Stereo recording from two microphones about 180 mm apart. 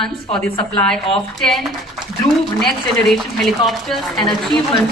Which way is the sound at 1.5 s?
Centre (ahead or behind).